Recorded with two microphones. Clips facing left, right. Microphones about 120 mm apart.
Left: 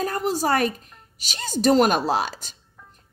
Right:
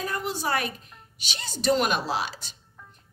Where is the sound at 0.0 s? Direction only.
40° left (ahead or behind).